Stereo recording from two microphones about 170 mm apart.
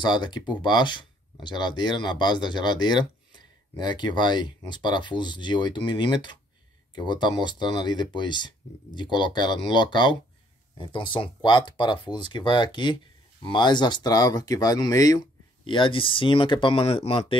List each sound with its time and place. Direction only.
0.0 s speech: 25° left (ahead or behind)